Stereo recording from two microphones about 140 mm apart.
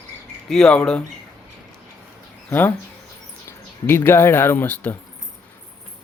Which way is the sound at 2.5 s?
15° left (ahead or behind).